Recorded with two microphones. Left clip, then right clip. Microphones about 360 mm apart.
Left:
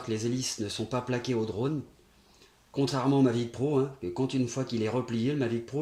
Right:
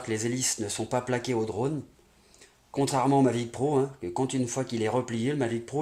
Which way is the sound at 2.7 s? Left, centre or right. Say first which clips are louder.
Right 3 dB; right.